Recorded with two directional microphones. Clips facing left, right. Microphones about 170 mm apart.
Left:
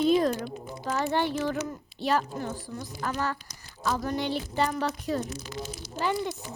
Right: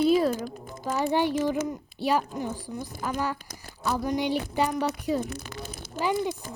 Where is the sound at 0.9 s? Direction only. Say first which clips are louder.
Right 2 dB; 10° right (ahead or behind).